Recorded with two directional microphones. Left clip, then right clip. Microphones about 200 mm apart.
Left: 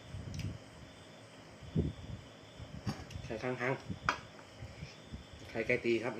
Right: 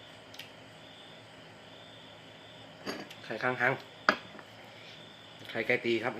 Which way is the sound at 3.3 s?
10° left (ahead or behind).